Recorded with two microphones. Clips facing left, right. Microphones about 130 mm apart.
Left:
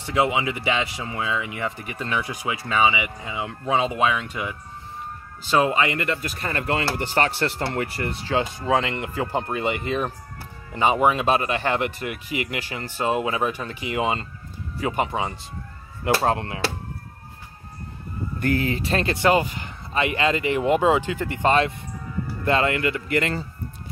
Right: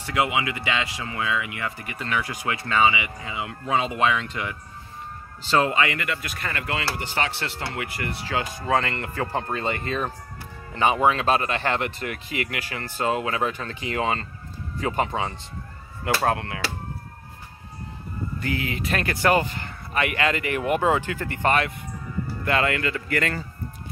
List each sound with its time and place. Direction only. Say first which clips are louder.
0.0 s speech: left 2 dB; 25° left (ahead or behind)
6.2 s speech: left 4 dB; 35° left (ahead or behind); by 15.3 s 15° left (ahead or behind)
16.3 s speech: left 1 dB; 25° left (ahead or behind)
18.4 s speech: left 6 dB; 40° left (ahead or behind); by 23.4 s 20° left (ahead or behind)